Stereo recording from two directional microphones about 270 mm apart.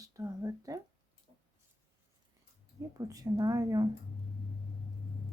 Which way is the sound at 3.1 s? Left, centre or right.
Centre.